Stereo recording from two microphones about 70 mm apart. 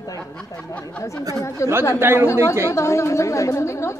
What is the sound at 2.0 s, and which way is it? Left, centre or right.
Speech, right.